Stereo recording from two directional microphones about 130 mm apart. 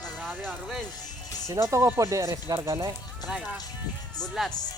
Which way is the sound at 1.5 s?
20° right (ahead or behind).